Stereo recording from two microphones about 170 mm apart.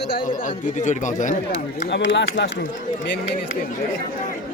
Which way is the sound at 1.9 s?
90° left.